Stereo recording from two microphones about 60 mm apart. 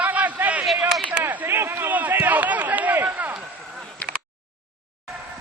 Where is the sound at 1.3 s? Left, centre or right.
Right.